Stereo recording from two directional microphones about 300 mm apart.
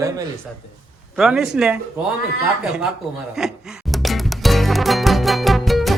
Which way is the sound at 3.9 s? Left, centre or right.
Centre.